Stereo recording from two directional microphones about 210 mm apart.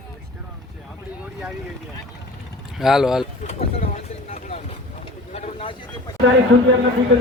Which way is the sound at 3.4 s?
30° left (ahead or behind).